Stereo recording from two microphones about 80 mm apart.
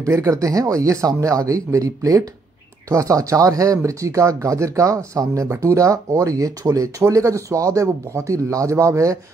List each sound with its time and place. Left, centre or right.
0.0 s speech: right